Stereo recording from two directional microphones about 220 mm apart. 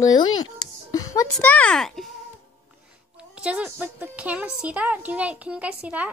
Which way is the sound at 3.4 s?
5° right (ahead or behind).